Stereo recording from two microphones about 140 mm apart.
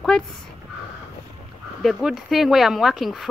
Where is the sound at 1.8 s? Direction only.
Centre (ahead or behind).